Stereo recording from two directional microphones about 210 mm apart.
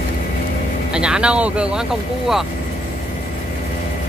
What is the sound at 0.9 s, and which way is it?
Speech, 5° right (ahead or behind).